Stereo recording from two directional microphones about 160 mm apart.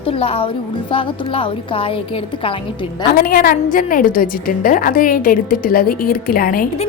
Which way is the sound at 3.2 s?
65° left (ahead or behind).